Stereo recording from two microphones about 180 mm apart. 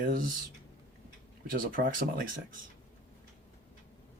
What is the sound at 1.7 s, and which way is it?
Speech, 50° right (ahead or behind).